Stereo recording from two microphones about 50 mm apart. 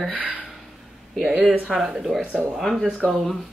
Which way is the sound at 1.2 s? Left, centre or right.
Centre.